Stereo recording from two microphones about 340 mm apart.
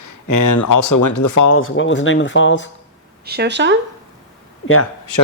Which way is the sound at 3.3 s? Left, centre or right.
Right.